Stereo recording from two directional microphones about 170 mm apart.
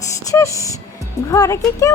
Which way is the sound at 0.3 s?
20° left (ahead or behind).